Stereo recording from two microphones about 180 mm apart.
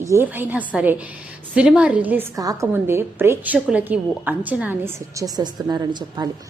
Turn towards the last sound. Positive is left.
turn(degrees=-20)  # may be behind; listen again after turning